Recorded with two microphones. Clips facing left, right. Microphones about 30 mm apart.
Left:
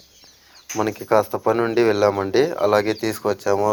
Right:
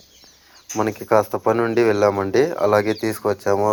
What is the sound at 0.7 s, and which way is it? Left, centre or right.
Speech, centre.